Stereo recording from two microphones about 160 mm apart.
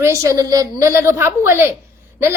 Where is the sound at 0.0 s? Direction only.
20° right (ahead or behind).